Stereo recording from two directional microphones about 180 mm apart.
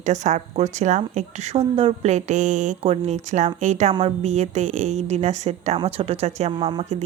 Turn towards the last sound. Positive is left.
turn(degrees=-35)  # may be behind; listen again after turning